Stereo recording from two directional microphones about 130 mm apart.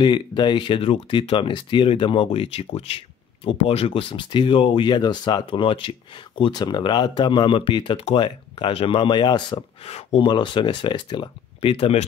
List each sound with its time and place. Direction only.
0.0 s speech: 35° left (ahead or behind)
9.8 s speech: 55° left (ahead or behind)
10.2 s speech: 35° left (ahead or behind)